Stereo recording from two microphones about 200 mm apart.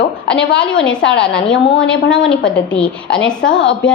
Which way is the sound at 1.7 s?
70° left (ahead or behind).